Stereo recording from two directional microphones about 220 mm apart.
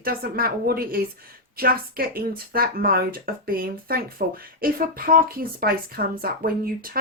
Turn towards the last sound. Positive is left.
turn(degrees=-40)  # may be behind; listen again after turning